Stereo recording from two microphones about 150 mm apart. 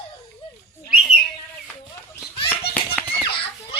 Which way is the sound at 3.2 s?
35° left (ahead or behind).